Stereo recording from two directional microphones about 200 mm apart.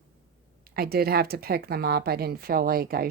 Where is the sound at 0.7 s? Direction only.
50° right (ahead or behind).